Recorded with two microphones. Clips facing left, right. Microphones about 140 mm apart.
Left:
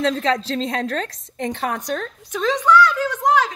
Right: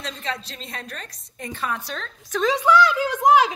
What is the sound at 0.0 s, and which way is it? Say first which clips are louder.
A woman's voice: left 11 dB; 90° left.